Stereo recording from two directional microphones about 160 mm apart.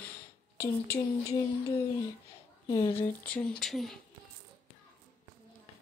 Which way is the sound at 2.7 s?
35° left (ahead or behind).